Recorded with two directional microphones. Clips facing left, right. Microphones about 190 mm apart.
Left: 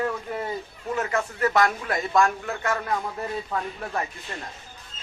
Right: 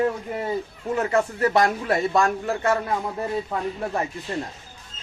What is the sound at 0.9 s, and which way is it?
Speech, 30° right (ahead or behind).